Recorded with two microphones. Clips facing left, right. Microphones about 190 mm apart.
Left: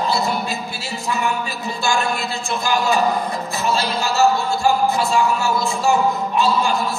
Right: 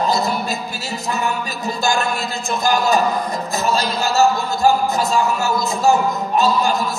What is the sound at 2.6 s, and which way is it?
Speech, 40° right (ahead or behind).